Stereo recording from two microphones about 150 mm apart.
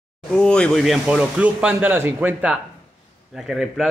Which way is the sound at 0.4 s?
5° left (ahead or behind).